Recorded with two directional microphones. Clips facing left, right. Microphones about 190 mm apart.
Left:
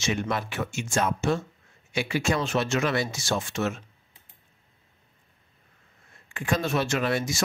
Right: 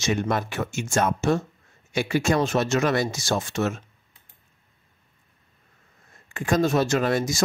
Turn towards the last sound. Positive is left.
turn(degrees=-40)  # may be behind; listen again after turning